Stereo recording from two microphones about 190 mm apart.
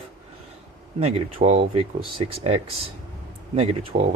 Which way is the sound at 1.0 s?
30° right (ahead or behind).